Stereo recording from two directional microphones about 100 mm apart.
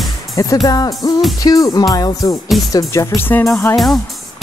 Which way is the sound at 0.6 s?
40° left (ahead or behind).